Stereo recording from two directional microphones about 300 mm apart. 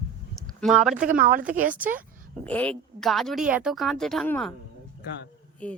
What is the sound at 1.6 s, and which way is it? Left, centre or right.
A woman's voice, centre.